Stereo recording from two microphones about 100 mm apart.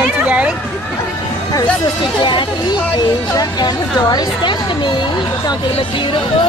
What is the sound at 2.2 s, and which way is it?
Speech, 50° left (ahead or behind).